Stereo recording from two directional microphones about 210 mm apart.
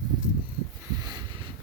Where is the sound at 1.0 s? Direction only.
20° right (ahead or behind).